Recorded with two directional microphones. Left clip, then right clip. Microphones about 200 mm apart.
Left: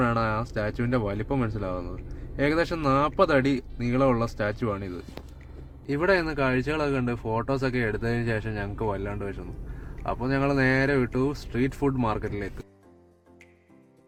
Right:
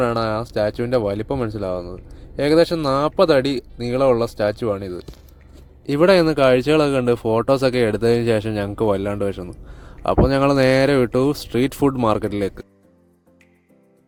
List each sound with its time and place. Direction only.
0.0 s speech: 35° right (ahead or behind)
5.8 s speech: 45° right (ahead or behind)